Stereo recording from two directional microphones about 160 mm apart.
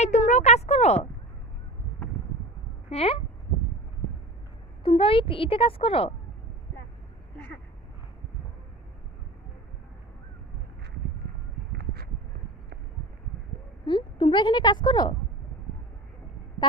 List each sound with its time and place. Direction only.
0.0 s speech: 45° left (ahead or behind)
2.9 s a woman's voice: 35° left (ahead or behind)
4.8 s a woman's voice: 35° left (ahead or behind)
13.8 s a woman's voice: 30° left (ahead or behind)